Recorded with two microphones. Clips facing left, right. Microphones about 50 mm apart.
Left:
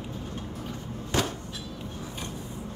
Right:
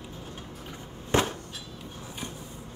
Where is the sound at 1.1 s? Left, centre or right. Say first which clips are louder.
Right 3 dB; right.